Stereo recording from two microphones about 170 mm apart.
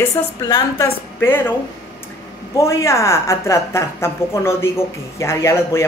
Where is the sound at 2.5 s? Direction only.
15° left (ahead or behind).